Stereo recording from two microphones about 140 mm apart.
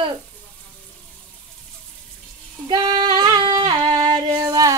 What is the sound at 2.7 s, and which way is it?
Female singing, 30° right (ahead or behind).